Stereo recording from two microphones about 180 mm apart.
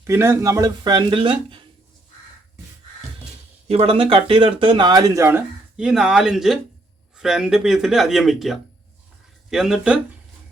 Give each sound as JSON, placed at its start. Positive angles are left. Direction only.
{"t": 0.1, "sound": "speech", "side_deg": -15}
{"t": 3.7, "sound": "speech", "side_deg": -35}